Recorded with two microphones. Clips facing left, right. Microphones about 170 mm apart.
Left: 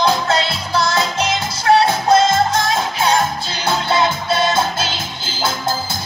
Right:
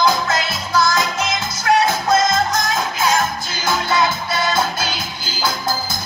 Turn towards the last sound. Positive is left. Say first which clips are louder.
# left 1 dB
turn(degrees=25)  # may be behind; listen again after turning